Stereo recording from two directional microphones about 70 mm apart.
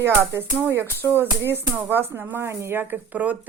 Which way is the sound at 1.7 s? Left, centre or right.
Right.